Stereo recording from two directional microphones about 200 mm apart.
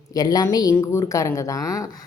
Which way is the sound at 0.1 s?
20° left (ahead or behind).